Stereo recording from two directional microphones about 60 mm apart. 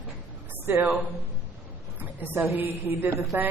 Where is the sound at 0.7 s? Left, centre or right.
Right.